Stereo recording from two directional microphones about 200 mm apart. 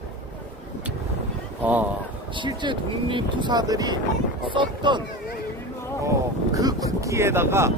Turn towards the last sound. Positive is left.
turn(degrees=-15)  # may be behind; listen again after turning